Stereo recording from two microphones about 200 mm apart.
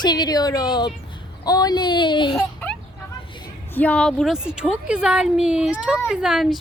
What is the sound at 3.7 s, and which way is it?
A woman's voice, 5° left (ahead or behind).